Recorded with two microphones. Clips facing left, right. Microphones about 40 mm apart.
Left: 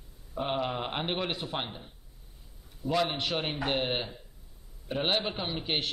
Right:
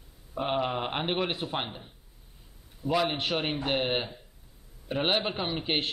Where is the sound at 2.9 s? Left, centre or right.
Centre.